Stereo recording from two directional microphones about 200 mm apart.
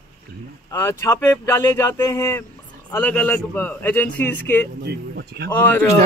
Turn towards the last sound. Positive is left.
turn(degrees=10)  # may be behind; listen again after turning